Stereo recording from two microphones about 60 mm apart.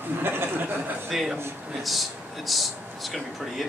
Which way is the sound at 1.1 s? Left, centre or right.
Centre.